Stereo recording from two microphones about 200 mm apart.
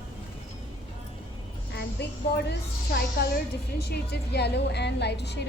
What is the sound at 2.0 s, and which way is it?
Speech, 55° left (ahead or behind).